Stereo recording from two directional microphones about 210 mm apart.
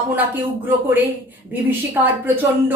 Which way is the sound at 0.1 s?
10° right (ahead or behind).